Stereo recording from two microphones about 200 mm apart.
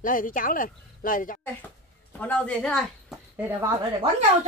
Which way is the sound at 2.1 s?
10° left (ahead or behind).